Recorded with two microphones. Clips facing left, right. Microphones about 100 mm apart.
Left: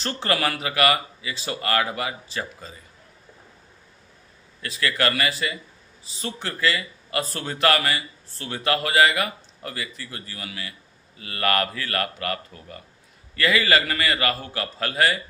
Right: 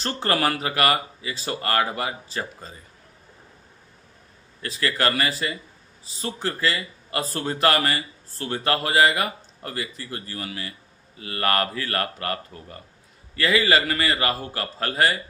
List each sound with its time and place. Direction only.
0.0 s speech: 35° right (ahead or behind)
4.6 s a man's voice: 30° right (ahead or behind)